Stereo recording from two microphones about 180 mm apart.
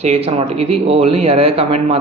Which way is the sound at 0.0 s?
35° right (ahead or behind).